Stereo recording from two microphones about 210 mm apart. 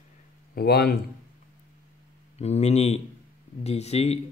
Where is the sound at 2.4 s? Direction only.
30° left (ahead or behind).